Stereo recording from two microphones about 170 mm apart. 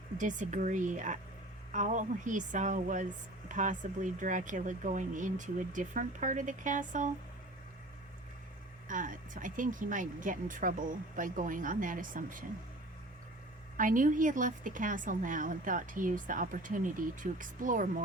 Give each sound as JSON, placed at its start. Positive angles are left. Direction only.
{"t": 0.2, "sound": "a woman's voice", "side_deg": -50}
{"t": 8.9, "sound": "a woman's voice", "side_deg": -50}
{"t": 13.7, "sound": "a woman's voice", "side_deg": -50}